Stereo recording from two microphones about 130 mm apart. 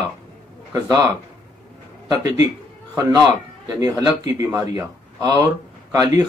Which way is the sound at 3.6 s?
25° right (ahead or behind).